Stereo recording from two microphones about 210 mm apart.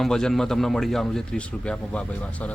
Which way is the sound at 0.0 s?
Centre (ahead or behind).